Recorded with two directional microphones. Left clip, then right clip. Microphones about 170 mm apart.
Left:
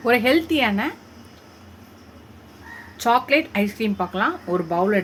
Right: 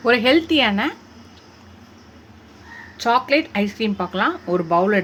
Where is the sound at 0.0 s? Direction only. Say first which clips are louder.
Right 2 dB; 15° right (ahead or behind).